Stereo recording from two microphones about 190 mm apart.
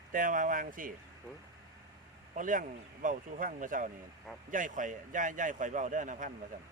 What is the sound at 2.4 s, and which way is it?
A man's voice, 45° right (ahead or behind).